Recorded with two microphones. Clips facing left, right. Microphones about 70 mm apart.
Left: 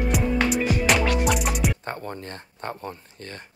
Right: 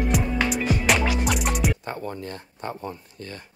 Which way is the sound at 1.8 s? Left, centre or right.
Left.